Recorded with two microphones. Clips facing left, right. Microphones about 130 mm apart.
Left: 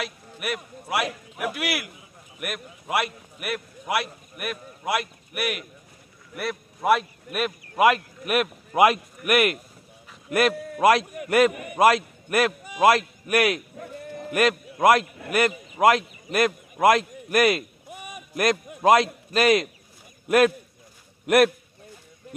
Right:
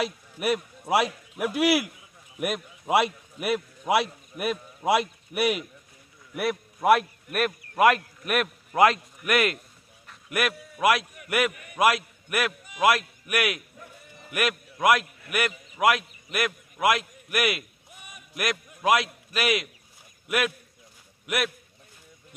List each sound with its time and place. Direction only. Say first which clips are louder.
0.0 s a man's voice: right 4 dB; 30° right (ahead or behind)
6.3 s a man's voice: right 3 dB; 10° right (ahead or behind)
8.7 s a man's voice: left 2 dB; 15° left (ahead or behind)
10.5 s a man's voice: left 2 dB; 35° left (ahead or behind)
13.7 s sheep: left 12 dB; 55° left (ahead or behind)
14.3 s a man's voice: left 6 dB; 35° left (ahead or behind)